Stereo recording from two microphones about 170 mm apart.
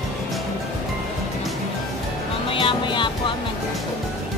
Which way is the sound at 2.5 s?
30° left (ahead or behind).